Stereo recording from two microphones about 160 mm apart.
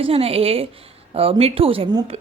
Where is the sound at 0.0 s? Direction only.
35° right (ahead or behind).